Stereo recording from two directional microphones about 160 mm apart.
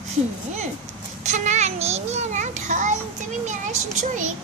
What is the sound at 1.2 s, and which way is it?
A child's voice, 50° right (ahead or behind).